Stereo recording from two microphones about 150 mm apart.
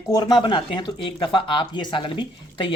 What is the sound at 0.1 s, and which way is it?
Speech, 30° left (ahead or behind).